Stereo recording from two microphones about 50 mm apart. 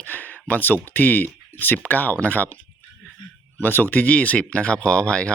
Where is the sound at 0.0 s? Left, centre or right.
Left.